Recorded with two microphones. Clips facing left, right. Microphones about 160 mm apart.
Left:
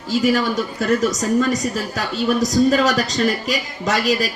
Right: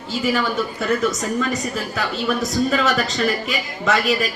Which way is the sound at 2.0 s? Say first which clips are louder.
Left 3 dB; 35° left (ahead or behind).